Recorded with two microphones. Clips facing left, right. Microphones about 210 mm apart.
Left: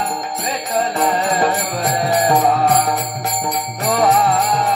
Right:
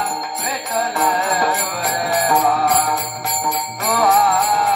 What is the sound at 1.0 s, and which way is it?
Music, 30° left (ahead or behind).